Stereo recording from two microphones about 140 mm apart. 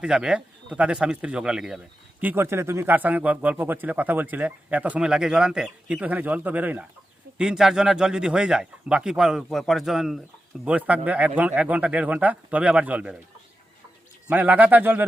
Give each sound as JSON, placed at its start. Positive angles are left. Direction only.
{"t": 0.0, "sound": "a man's voice", "side_deg": -5}
{"t": 2.2, "sound": "a man's voice", "side_deg": -15}
{"t": 14.3, "sound": "a man's voice", "side_deg": -10}